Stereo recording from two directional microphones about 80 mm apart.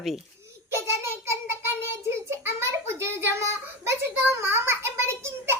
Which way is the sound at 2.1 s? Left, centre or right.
Right.